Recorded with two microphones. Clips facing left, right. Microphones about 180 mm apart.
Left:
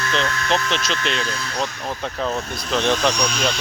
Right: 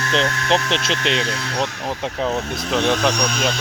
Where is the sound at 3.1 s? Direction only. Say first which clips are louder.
Right 1 dB; 55° right (ahead or behind).